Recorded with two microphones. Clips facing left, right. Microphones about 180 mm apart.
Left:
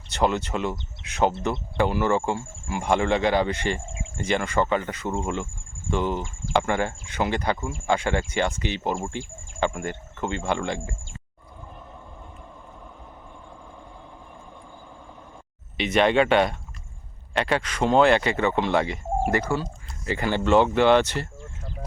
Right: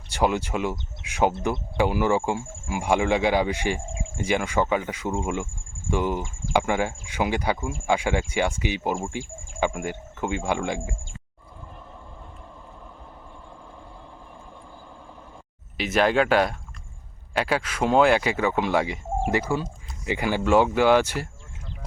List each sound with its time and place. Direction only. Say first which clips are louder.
0.1 s speech: even; 10° right (ahead or behind)
9.2 s speech: right 1 dB; 45° right (ahead or behind)
9.6 s speech: even; 10° right (ahead or behind)
15.8 s speech: left 1 dB; 5° right (ahead or behind)